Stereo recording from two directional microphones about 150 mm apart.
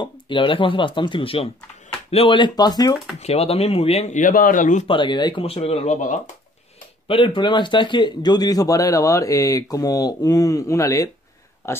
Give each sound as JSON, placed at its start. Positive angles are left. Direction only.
{"t": 0.0, "sound": "a man's voice", "side_deg": 35}
{"t": 3.2, "sound": "speech", "side_deg": 45}
{"t": 4.8, "sound": "speech", "side_deg": 30}
{"t": 7.1, "sound": "a man's voice", "side_deg": 35}